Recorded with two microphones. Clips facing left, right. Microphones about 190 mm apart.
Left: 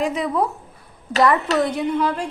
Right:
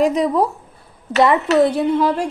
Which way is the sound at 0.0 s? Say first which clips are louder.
Right 5 dB; 40° right (ahead or behind).